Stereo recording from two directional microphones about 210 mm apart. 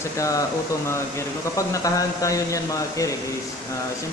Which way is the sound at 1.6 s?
15° left (ahead or behind).